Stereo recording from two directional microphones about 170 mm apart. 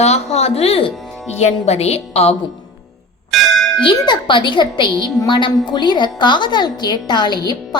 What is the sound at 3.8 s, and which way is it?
A woman's voice, 25° left (ahead or behind).